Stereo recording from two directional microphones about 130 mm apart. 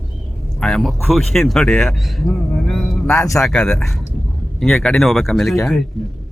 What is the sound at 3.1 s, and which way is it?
Speech, 25° left (ahead or behind).